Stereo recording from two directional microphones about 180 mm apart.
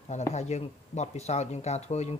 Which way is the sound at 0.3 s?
40° left (ahead or behind).